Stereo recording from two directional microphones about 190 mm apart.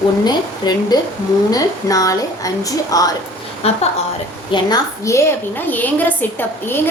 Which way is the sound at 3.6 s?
30° left (ahead or behind).